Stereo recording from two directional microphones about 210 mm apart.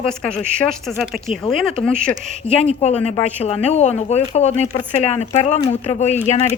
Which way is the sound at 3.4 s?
30° left (ahead or behind).